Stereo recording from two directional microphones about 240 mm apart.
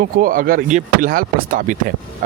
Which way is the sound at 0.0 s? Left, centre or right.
Right.